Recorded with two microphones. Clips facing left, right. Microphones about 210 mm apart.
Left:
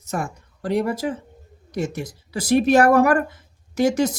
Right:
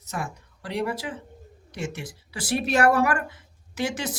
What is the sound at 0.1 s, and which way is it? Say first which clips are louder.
A woman's voice: left 6 dB; 45° left (ahead or behind).